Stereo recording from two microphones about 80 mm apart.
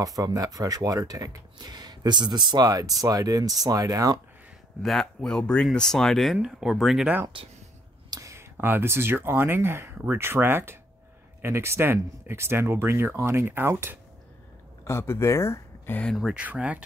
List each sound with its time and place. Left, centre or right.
0.0 s speech: right
4.8 s speech: centre
7.3 s speech: right
8.1 s a sound: right
8.5 s speech: right
14.9 s speech: left
16.0 s speech: centre
16.3 s speech: centre